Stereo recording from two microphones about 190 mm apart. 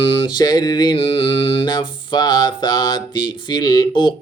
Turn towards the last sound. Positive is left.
turn(degrees=25)  # may be behind; listen again after turning